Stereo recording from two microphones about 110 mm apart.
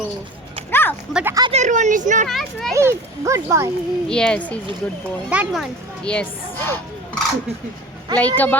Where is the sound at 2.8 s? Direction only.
25° right (ahead or behind).